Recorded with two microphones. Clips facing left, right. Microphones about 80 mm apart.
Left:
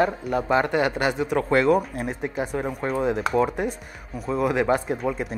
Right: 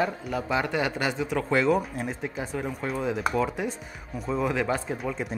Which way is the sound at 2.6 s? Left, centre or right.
Centre.